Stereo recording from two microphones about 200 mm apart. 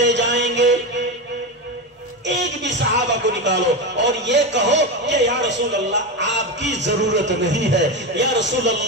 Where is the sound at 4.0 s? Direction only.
60° right (ahead or behind).